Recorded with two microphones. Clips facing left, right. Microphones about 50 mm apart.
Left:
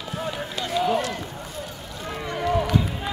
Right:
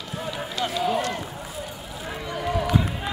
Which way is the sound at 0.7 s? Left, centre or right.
Centre.